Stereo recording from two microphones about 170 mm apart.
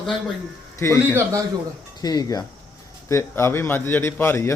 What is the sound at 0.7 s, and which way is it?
Speech, 15° left (ahead or behind).